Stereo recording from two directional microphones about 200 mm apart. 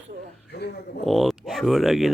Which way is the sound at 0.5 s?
55° left (ahead or behind).